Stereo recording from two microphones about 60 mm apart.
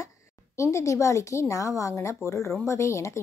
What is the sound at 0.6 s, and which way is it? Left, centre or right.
Speech, left.